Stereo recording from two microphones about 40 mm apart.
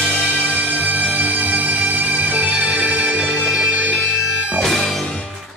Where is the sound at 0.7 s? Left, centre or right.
Right.